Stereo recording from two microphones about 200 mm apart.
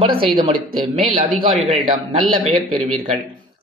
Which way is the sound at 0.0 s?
25° right (ahead or behind).